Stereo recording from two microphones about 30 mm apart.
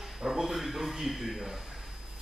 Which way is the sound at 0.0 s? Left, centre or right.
Centre.